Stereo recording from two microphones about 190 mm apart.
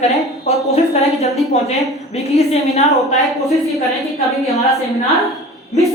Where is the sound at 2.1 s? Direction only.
35° left (ahead or behind).